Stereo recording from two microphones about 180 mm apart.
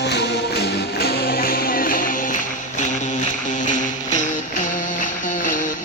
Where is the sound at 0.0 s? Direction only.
70° left (ahead or behind).